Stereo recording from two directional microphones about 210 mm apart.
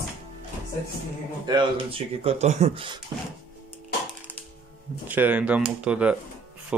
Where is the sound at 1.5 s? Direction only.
25° right (ahead or behind).